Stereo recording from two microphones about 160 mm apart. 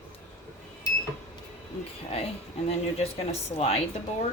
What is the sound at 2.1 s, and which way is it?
Speech, 40° left (ahead or behind).